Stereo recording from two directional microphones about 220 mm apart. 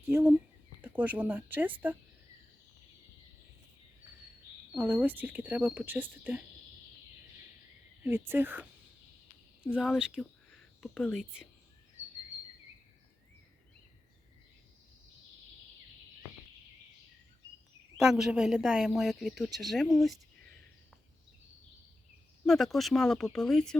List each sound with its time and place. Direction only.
0.0 s speech: 10° right (ahead or behind)
4.7 s speech: 10° right (ahead or behind)
8.0 s speech: 10° right (ahead or behind)
9.6 s speech: 5° right (ahead or behind)
17.9 s speech: 5° right (ahead or behind)
22.4 s speech: centre (ahead or behind)